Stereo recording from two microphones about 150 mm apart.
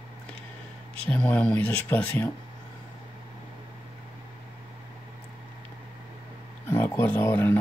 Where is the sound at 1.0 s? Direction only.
10° left (ahead or behind).